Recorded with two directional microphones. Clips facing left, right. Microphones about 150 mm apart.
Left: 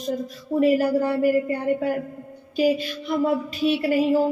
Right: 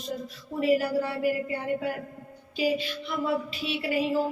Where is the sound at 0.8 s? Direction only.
45° left (ahead or behind).